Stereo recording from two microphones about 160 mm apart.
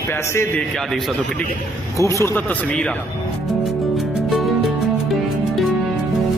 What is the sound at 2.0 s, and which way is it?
Speech, 20° left (ahead or behind).